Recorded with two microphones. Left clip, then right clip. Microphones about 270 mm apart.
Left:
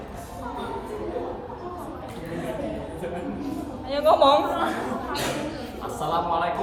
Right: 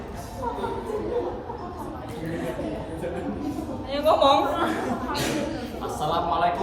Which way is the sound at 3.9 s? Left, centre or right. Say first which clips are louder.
Left 1 dB; left.